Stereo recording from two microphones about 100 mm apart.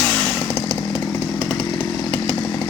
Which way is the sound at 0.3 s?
5° left (ahead or behind).